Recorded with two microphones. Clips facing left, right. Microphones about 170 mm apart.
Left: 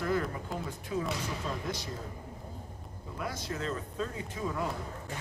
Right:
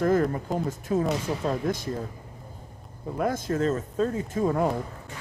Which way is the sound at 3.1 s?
50° right (ahead or behind).